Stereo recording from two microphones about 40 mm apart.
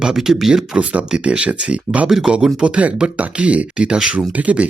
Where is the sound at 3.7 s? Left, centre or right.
Right.